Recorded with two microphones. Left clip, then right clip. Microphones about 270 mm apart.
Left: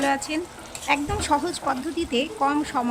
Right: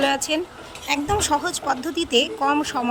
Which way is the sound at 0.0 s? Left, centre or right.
Centre.